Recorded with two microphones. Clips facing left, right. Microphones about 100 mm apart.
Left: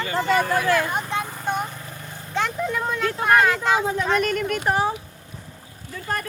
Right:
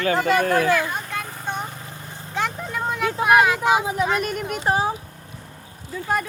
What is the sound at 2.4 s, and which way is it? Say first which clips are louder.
Vehicle: left 1 dB; centre (ahead or behind).